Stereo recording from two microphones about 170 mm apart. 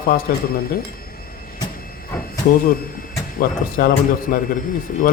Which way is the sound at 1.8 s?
60° left (ahead or behind).